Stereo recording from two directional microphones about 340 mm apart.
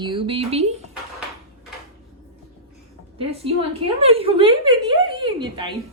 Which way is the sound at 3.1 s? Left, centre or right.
Centre.